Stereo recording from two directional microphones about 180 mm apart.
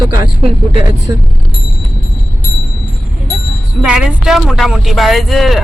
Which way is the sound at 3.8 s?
5° right (ahead or behind).